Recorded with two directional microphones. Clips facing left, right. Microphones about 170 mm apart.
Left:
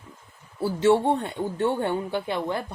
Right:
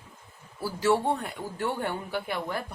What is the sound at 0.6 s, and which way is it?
A man's voice, 25° left (ahead or behind).